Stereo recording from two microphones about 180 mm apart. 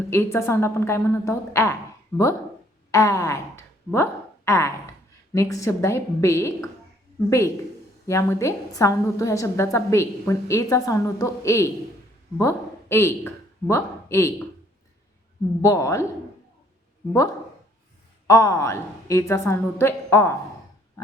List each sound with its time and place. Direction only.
0.1 s a woman's voice: 15° left (ahead or behind)
15.6 s a woman's voice: 15° left (ahead or behind)
18.3 s a woman's voice: 15° left (ahead or behind)